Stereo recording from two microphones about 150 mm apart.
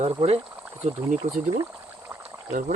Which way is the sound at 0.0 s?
40° right (ahead or behind).